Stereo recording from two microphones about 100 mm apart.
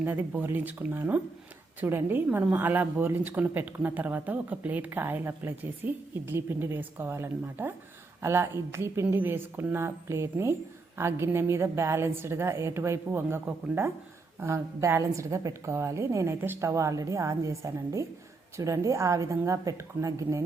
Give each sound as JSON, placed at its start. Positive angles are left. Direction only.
{"t": 0.0, "sound": "a woman's voice", "side_deg": -15}